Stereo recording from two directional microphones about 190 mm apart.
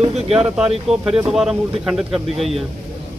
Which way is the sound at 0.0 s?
30° right (ahead or behind).